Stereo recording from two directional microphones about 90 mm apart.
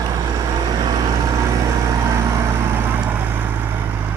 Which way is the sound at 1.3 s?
35° right (ahead or behind).